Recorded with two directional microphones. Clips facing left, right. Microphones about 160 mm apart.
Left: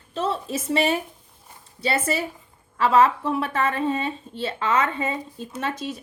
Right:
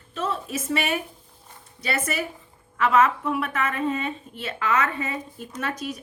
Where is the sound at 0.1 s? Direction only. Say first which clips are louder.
Left 2 dB; 30° left (ahead or behind).